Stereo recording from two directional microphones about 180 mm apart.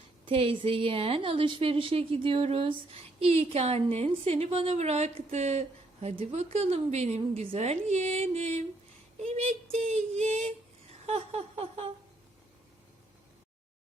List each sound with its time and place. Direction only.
0.3 s a woman's voice: 30° right (ahead or behind)